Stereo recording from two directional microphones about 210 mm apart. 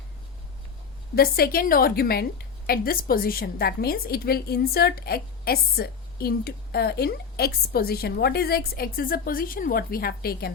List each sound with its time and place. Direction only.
1.1 s a woman's voice: 45° left (ahead or behind)